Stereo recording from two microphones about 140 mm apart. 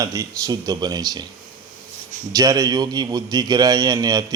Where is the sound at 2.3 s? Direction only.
25° right (ahead or behind).